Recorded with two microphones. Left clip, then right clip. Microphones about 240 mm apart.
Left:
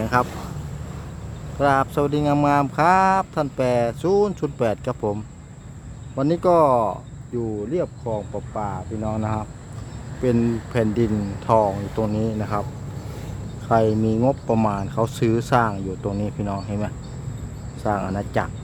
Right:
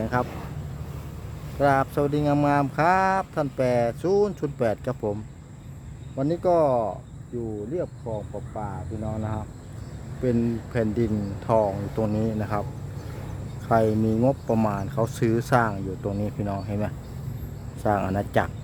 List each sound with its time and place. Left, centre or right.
0.0 s speech: centre
1.5 s speech: centre
6.1 s speech: centre
13.7 s speech: centre